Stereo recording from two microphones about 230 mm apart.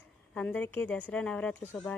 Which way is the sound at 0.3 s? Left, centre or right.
Centre.